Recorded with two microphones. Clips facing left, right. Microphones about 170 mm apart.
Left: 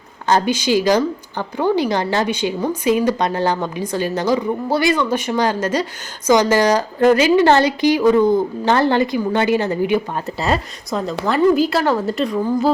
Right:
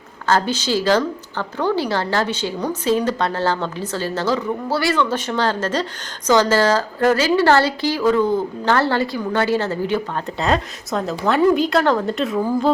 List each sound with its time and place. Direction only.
0.3 s a woman's voice: 15° left (ahead or behind)
10.2 s speech: 5° left (ahead or behind)